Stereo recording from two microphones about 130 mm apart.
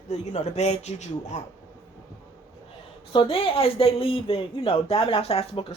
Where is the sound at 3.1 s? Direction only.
45° left (ahead or behind).